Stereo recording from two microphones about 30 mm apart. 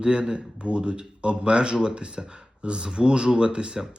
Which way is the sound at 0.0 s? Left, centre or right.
Right.